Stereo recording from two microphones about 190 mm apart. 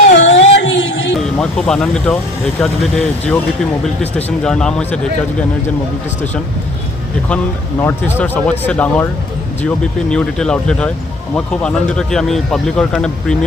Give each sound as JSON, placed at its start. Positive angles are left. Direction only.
{"t": 0.1, "sound": "a sound", "side_deg": 70}
{"t": 0.6, "sound": "music", "side_deg": 75}
{"t": 1.4, "sound": "speech", "side_deg": 5}
{"t": 7.8, "sound": "speech", "side_deg": 10}